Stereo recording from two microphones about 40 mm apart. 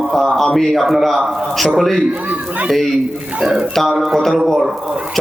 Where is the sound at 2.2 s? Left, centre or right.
Right.